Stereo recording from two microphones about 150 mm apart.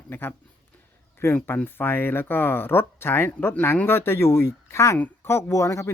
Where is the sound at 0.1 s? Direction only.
15° left (ahead or behind).